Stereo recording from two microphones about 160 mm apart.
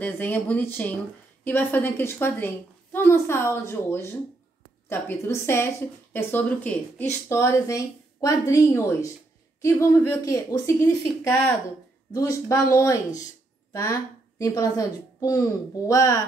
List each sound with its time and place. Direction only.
0.0 s a woman's voice: 10° left (ahead or behind)
14.4 s speech: 20° left (ahead or behind)